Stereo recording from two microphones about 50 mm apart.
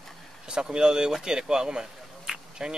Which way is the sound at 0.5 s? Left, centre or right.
Centre.